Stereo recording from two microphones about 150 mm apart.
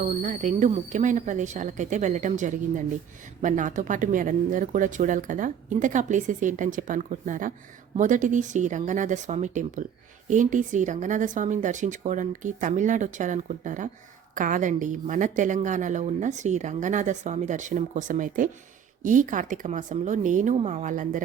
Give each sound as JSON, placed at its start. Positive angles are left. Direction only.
{"t": 0.0, "sound": "a woman's voice", "side_deg": -55}